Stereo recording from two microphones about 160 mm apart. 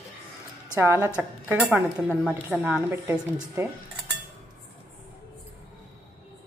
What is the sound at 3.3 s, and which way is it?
Speech, 15° right (ahead or behind).